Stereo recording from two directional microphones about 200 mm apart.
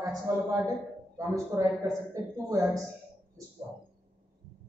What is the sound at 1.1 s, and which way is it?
Speech, 15° right (ahead or behind).